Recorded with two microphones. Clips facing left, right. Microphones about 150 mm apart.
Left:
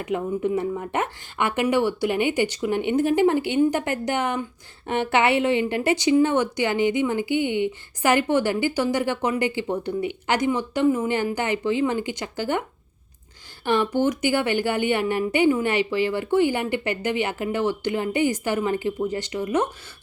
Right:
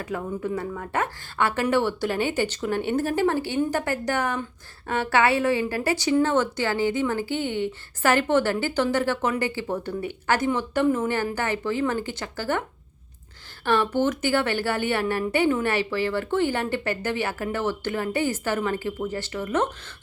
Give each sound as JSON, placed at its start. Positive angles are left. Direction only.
{"t": 0.0, "sound": "a woman's voice", "side_deg": 20}
{"t": 13.7, "sound": "a woman's voice", "side_deg": 15}